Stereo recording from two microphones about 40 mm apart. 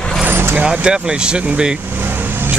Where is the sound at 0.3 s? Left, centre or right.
Right.